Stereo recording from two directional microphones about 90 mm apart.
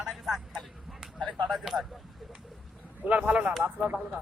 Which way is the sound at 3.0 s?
15° right (ahead or behind).